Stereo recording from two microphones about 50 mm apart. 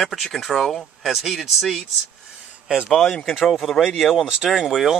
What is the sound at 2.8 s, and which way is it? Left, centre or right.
Speech, centre.